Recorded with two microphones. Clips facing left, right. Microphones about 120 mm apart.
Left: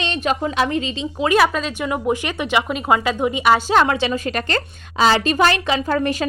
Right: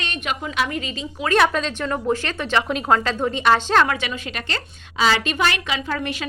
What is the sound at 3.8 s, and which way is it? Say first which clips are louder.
A woman's voice: left 5 dB; 30° left (ahead or behind).